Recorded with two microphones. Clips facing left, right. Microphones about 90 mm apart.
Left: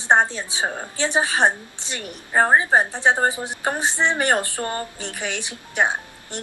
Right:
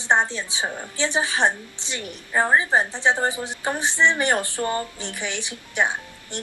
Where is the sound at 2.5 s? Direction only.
20° left (ahead or behind).